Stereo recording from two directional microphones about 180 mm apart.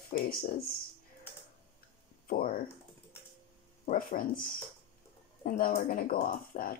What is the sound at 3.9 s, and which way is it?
Speech, 50° left (ahead or behind).